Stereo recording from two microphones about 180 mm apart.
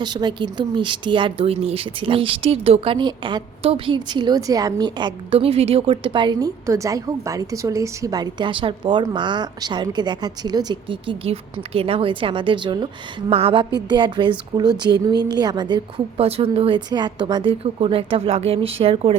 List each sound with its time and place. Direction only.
0.0 s speech: 25° right (ahead or behind)